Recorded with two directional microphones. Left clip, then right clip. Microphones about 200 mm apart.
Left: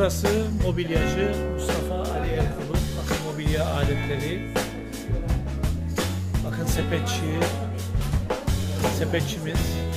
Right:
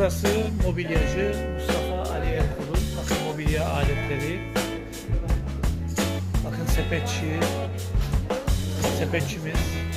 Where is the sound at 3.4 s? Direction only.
Centre (ahead or behind).